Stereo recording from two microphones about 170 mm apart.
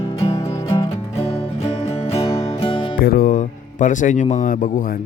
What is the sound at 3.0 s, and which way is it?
Speech, 60° left (ahead or behind).